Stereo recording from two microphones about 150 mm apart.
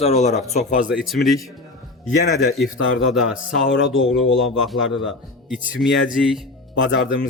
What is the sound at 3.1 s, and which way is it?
Speech, centre (ahead or behind).